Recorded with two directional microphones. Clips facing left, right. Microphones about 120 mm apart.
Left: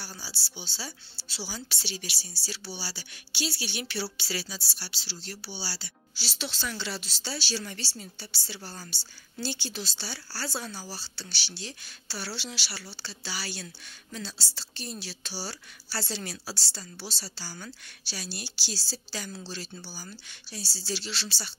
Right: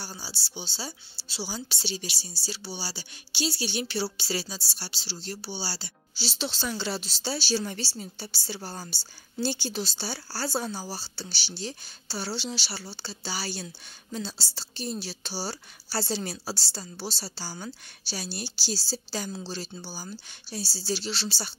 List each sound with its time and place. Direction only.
0.0 s a woman's voice: 25° right (ahead or behind); by 21.5 s 40° right (ahead or behind)